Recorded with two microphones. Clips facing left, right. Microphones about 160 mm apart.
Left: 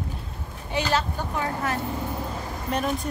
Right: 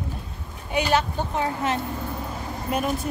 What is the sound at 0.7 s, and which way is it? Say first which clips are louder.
A woman's voice: right 3 dB; 15° right (ahead or behind).